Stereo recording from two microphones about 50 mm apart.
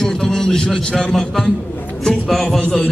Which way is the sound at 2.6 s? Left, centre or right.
Centre.